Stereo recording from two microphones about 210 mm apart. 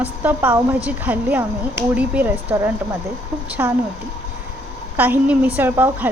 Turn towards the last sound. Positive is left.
turn(degrees=-10)  # may be behind; listen again after turning